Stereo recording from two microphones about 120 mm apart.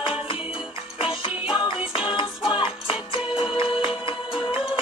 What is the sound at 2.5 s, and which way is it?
Music, 45° left (ahead or behind).